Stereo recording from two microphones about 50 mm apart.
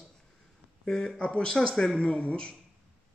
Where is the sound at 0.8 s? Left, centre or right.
Centre.